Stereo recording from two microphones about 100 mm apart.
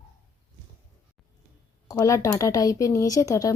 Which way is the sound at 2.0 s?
30° left (ahead or behind).